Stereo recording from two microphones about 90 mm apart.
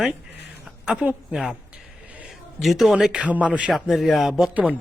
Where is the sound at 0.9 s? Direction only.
10° right (ahead or behind).